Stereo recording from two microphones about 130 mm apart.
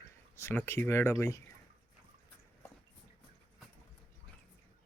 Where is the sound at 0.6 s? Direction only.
20° left (ahead or behind).